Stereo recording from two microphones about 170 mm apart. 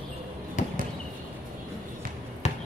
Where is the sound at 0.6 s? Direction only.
45° left (ahead or behind).